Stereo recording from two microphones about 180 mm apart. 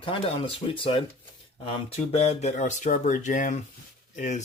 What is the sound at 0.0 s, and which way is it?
Speech, 30° left (ahead or behind).